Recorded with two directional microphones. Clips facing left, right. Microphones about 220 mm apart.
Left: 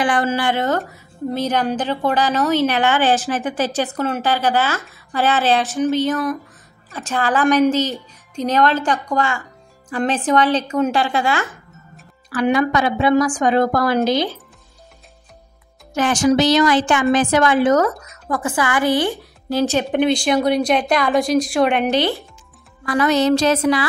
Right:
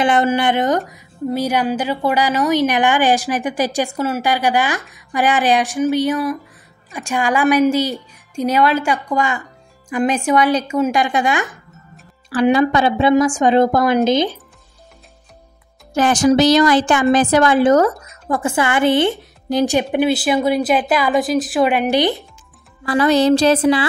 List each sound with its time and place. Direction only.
0.0 s a woman's voice: 20° right (ahead or behind)
12.3 s a woman's voice: 30° right (ahead or behind)
15.9 s a woman's voice: 35° right (ahead or behind); by 22.0 s 5° right (ahead or behind)
22.8 s a woman's voice: 30° right (ahead or behind)